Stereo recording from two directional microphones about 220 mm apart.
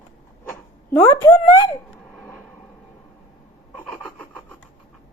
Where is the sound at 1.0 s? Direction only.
10° left (ahead or behind).